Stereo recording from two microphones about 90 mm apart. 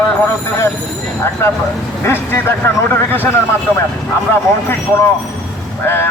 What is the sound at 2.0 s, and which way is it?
Speech, 30° left (ahead or behind).